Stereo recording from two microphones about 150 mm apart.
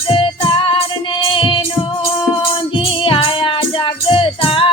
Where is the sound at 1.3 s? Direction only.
35° left (ahead or behind).